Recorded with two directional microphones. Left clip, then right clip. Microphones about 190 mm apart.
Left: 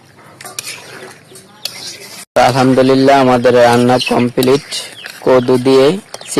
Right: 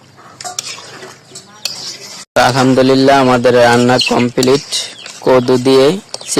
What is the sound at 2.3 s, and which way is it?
A man's voice, centre (ahead or behind).